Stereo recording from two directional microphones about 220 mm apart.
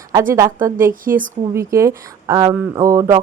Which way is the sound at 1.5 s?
10° right (ahead or behind).